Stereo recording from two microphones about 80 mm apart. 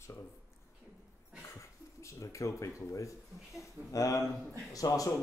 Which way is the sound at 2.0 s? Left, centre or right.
Left.